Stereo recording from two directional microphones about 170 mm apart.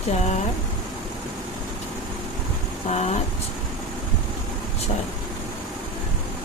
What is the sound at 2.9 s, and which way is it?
Speech, 40° left (ahead or behind).